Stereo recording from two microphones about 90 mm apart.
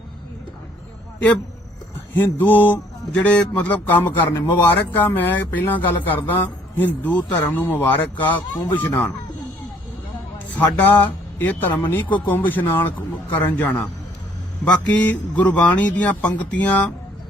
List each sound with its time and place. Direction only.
2.1 s mantra: 25° left (ahead or behind)
10.3 s speech: 20° left (ahead or behind)
12.1 s mantra: 20° left (ahead or behind)
14.6 s a man's voice: 15° left (ahead or behind)